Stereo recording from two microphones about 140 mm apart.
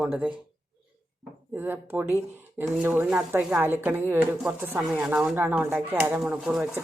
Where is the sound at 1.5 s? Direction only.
15° right (ahead or behind).